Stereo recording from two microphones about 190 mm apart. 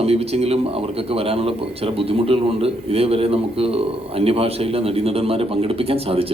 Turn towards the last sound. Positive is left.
turn(degrees=-30)  # may be behind; listen again after turning